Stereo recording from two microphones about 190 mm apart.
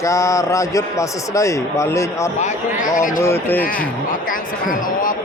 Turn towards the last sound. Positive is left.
turn(degrees=45)  # may be behind; listen again after turning